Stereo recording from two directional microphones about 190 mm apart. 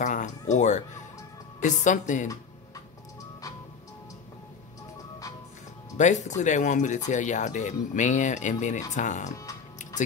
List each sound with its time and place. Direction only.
0.0 s speech: 40° left (ahead or behind)
5.9 s speech: 40° left (ahead or behind)